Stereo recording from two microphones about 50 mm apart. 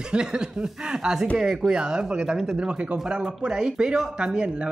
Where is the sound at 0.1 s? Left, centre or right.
Centre.